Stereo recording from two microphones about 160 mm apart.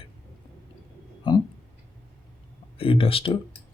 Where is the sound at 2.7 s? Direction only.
35° left (ahead or behind).